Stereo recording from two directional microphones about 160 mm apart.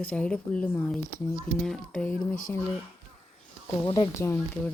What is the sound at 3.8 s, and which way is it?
Speech, 25° left (ahead or behind).